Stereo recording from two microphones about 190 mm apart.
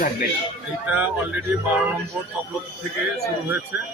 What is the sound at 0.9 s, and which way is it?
Speech, 10° right (ahead or behind).